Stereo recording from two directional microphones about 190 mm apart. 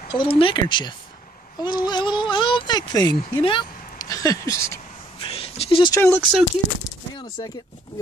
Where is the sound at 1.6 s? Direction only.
20° left (ahead or behind).